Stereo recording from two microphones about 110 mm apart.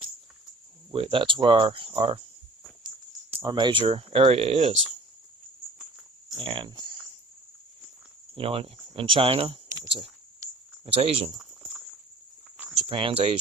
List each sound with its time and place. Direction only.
0.9 s speech: 55° right (ahead or behind)
3.4 s speech: 45° right (ahead or behind); by 4.7 s 65° right (ahead or behind)
6.3 s speech: 50° right (ahead or behind)
8.4 s speech: 55° right (ahead or behind)
10.8 s speech: 60° right (ahead or behind)
11.3 s a sound: 5° right (ahead or behind)
12.9 s speech: 50° right (ahead or behind)